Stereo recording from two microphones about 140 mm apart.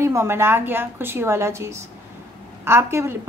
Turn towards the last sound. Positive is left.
turn(degrees=-20)  # may be behind; listen again after turning